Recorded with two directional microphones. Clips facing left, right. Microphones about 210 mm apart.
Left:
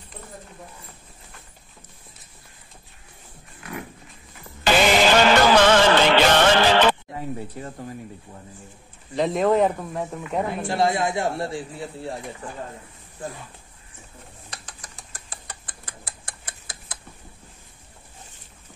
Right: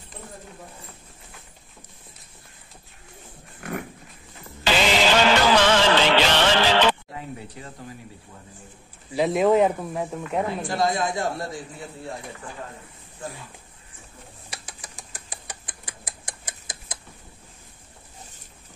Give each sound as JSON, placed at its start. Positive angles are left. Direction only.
{"t": 4.6, "sound": "music", "side_deg": 50}
{"t": 9.1, "sound": "speech", "side_deg": -5}
{"t": 10.7, "sound": "a man's voice", "side_deg": 25}
{"t": 14.5, "sound": "a sound", "side_deg": -10}
{"t": 16.3, "sound": "tick-tock", "side_deg": -15}